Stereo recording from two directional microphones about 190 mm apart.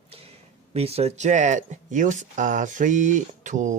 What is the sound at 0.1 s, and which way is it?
Speech, 30° right (ahead or behind).